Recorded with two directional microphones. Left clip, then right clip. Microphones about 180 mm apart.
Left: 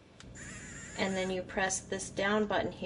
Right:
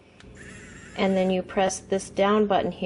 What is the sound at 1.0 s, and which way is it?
A woman's voice, 40° right (ahead or behind).